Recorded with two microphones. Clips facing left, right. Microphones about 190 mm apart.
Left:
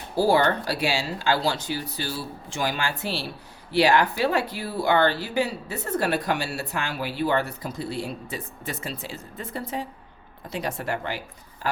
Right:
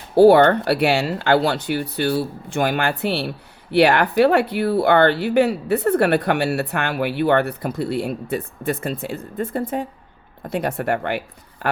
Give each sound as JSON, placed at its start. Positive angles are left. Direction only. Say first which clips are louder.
{"t": 0.2, "sound": "speech", "louder": "right 9 dB", "side_deg": -65}